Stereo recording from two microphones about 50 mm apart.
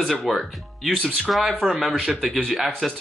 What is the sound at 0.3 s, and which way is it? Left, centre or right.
Speech, centre.